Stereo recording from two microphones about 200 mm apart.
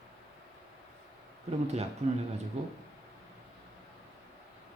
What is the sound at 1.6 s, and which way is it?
Speech, 30° right (ahead or behind).